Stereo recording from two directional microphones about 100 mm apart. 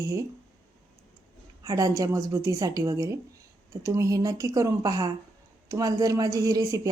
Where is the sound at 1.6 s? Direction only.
35° right (ahead or behind).